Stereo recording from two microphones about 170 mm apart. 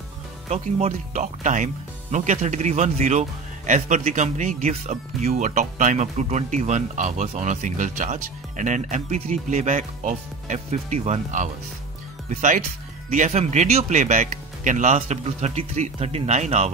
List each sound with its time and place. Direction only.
0.5 s speech: 40° right (ahead or behind)